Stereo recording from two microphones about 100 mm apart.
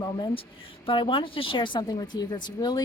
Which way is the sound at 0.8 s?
60° left (ahead or behind).